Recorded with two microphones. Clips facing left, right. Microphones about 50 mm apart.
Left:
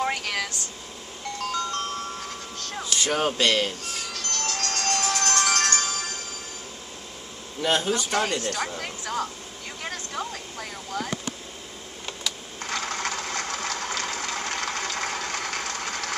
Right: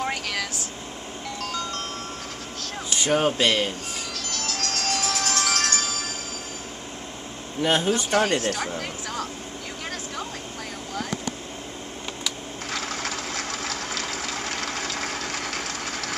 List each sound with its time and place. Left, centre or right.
0.0 s air conditioning: centre
1.4 s music: centre
2.9 s speech: centre
4.1 s music: centre
7.6 s speech: centre
8.4 s speech: centre
12.3 s sewing machine: centre